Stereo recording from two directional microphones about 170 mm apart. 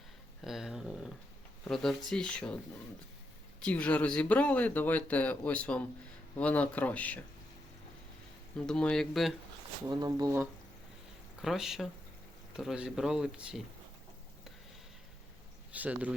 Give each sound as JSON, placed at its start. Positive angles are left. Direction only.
{"t": 0.4, "sound": "speech", "side_deg": 0}
{"t": 3.6, "sound": "speech", "side_deg": 10}
{"t": 8.5, "sound": "speech", "side_deg": 5}
{"t": 9.8, "sound": "speech", "side_deg": -25}
{"t": 11.4, "sound": "speech", "side_deg": 0}
{"t": 15.7, "sound": "speech", "side_deg": -10}